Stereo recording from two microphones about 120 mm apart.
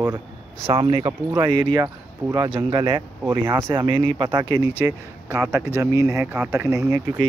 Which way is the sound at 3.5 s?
40° right (ahead or behind).